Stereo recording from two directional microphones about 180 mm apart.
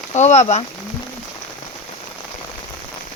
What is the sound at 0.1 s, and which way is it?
Speech, 40° left (ahead or behind).